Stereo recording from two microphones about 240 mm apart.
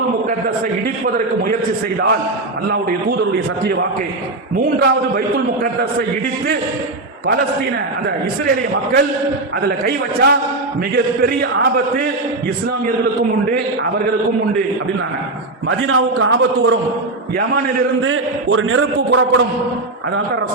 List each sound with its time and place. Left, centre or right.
4.5 s a man's voice: right
8.4 s a man's voice: right
15.9 s a man's voice: right
18.0 s a man's voice: right